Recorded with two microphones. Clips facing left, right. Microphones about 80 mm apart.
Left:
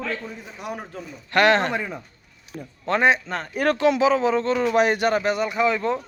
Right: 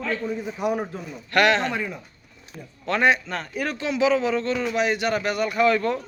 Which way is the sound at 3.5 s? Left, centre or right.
Left.